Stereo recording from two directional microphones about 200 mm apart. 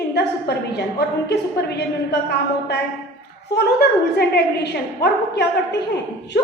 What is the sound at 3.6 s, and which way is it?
A woman's voice, 55° left (ahead or behind).